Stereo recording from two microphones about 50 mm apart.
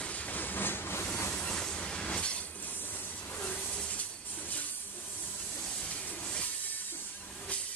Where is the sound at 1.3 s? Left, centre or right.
Centre.